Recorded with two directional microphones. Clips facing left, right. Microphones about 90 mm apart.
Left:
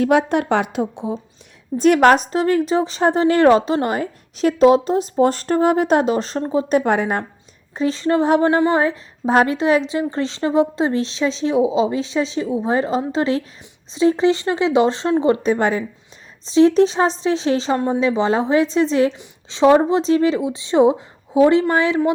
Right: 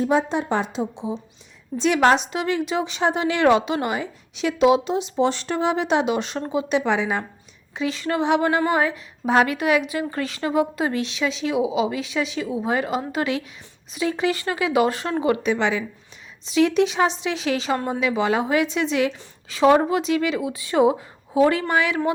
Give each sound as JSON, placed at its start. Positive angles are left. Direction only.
{"t": 0.0, "sound": "speech", "side_deg": 70}
{"t": 7.8, "sound": "speech", "side_deg": 35}
{"t": 15.5, "sound": "speech", "side_deg": 45}
{"t": 16.5, "sound": "speech", "side_deg": 35}
{"t": 19.1, "sound": "speech", "side_deg": 20}